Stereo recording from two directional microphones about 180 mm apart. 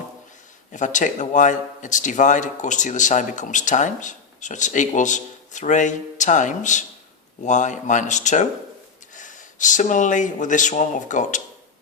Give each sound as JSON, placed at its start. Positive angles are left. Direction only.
{"t": 0.7, "sound": "speech", "side_deg": 45}